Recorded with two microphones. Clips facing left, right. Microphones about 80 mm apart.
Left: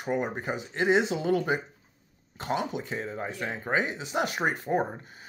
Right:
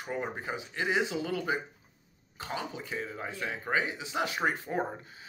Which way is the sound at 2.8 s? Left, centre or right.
Left.